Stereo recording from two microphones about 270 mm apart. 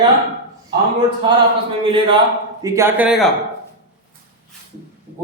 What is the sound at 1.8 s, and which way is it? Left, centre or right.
Speech, centre.